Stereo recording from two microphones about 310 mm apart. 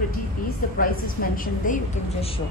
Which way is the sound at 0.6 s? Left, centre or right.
Left.